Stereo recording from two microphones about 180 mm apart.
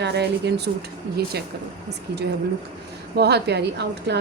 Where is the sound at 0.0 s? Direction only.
70° right (ahead or behind).